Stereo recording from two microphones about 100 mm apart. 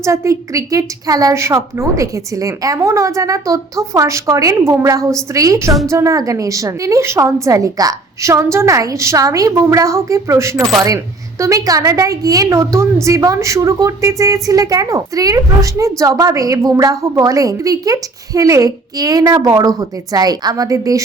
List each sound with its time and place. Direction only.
0.0 s a woman's voice: 30° right (ahead or behind)